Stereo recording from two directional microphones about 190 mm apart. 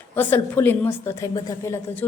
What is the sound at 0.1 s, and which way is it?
A woman's voice, 10° left (ahead or behind).